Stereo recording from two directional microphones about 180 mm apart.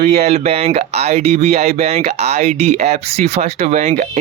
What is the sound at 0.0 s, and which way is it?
Speech, 35° right (ahead or behind).